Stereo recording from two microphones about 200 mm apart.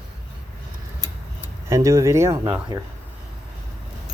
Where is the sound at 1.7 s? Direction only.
15° right (ahead or behind).